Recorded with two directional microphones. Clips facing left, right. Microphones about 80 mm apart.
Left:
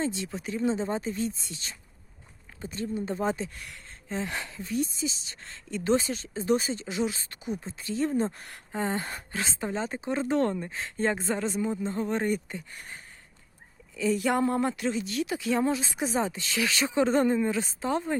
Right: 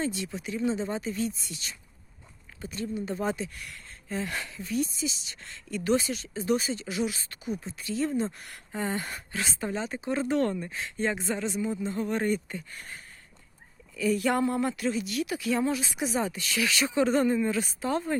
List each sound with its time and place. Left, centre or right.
0.0 s speech: left
14.4 s speech: left